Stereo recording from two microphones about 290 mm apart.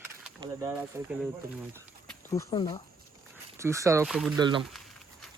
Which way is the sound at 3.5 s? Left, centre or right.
Centre.